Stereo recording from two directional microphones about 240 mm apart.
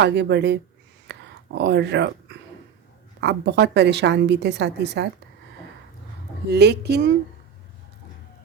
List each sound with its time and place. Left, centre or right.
0.0 s a woman's voice: right
1.1 s a sound: right
1.5 s a woman's voice: right
6.5 s a woman's voice: right